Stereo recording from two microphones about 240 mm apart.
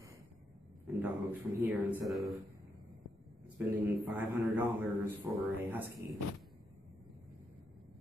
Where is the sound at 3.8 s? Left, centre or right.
Centre.